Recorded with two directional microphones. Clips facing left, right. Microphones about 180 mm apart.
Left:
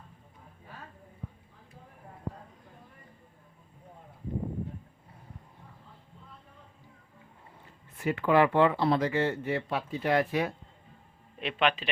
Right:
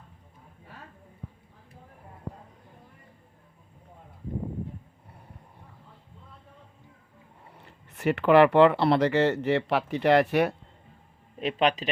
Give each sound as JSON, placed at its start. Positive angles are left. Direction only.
{"t": 7.5, "sound": "speech", "side_deg": -75}
{"t": 11.3, "sound": "speech", "side_deg": -40}